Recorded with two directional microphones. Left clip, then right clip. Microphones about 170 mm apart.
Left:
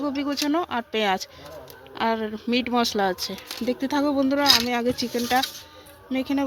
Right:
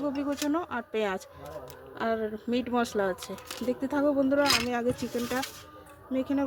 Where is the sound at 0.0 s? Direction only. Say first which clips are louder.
Left 4 dB; 35° left (ahead or behind).